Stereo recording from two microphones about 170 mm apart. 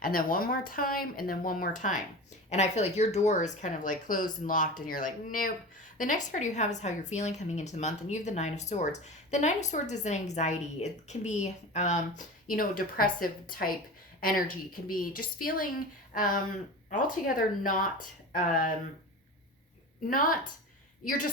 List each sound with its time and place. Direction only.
0.0 s speech: 55° left (ahead or behind)
20.1 s speech: 55° left (ahead or behind)